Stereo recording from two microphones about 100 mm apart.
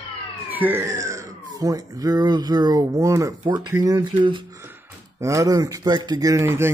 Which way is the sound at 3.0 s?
30° right (ahead or behind).